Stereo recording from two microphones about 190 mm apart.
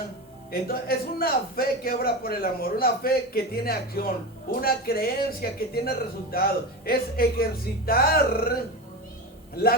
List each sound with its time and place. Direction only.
0.5 s a man's voice: 55° left (ahead or behind)